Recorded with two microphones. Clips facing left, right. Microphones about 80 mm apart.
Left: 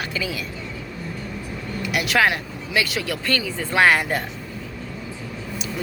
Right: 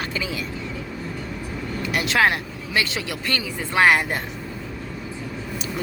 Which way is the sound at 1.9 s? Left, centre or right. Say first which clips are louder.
Even; right.